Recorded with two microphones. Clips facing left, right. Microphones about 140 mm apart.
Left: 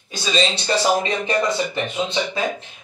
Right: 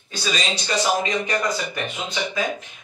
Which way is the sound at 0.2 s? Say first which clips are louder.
Left 6 dB; 25° left (ahead or behind).